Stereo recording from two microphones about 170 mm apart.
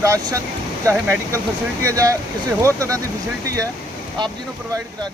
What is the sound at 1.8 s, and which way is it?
Speech, 20° right (ahead or behind).